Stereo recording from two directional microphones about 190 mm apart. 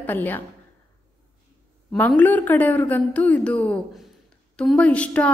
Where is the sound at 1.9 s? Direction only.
10° left (ahead or behind).